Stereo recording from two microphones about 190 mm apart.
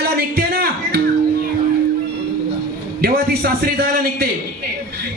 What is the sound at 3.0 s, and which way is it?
A man's voice, 55° right (ahead or behind).